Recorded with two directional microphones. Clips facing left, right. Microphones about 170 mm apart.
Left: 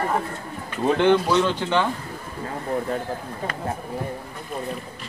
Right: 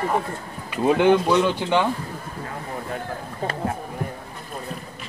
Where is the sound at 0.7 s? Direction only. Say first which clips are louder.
Right 1 dB; 10° right (ahead or behind).